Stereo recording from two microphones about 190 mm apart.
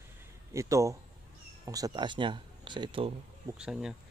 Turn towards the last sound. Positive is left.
turn(degrees=-5)  # may be behind; listen again after turning